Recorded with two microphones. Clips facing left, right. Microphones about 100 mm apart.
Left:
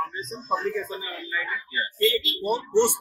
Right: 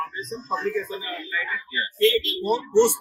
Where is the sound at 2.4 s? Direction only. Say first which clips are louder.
Right 2 dB; 15° left (ahead or behind).